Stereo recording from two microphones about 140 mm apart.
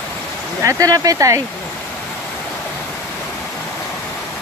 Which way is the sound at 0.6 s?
25° right (ahead or behind).